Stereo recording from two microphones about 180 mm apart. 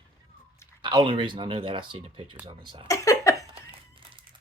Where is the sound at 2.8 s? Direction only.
20° left (ahead or behind).